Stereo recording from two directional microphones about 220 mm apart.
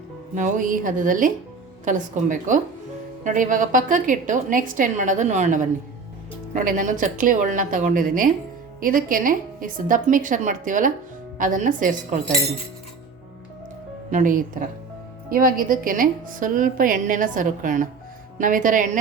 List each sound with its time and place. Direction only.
0.3 s a woman's voice: 35° right (ahead or behind)
14.1 s a woman's voice: 35° right (ahead or behind)